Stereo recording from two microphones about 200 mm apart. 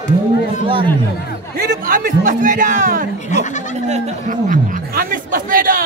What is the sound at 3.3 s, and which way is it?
Speech, 35° left (ahead or behind).